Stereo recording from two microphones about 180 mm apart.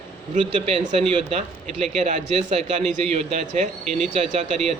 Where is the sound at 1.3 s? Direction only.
35° right (ahead or behind).